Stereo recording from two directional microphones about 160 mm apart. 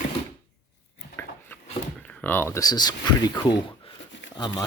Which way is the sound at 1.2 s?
10° left (ahead or behind).